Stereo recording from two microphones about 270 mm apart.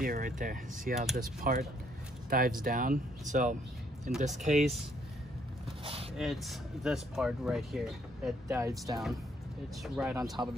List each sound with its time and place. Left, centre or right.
0.0 s speech: right
6.1 s speech: centre